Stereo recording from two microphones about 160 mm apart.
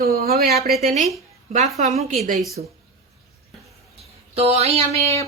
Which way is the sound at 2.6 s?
50° right (ahead or behind).